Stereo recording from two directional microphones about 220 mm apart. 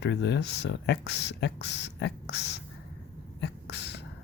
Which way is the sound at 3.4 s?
50° left (ahead or behind).